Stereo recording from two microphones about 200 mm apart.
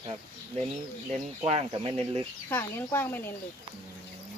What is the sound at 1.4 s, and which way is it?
Speech, 30° right (ahead or behind).